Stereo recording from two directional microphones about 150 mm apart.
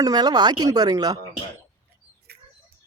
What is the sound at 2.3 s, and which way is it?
Bird, 90° right.